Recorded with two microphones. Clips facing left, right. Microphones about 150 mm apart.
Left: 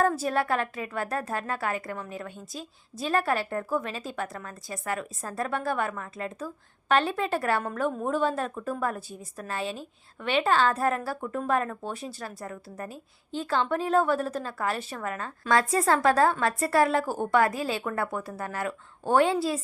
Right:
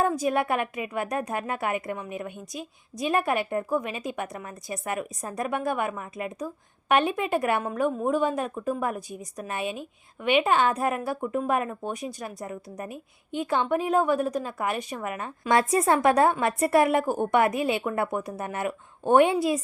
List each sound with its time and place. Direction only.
0.0 s a woman's voice: 15° right (ahead or behind)